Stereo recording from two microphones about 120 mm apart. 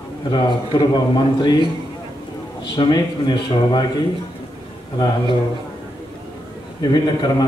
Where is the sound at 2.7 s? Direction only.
35° left (ahead or behind).